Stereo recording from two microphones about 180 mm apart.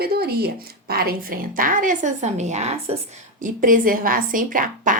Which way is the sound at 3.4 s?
50° right (ahead or behind).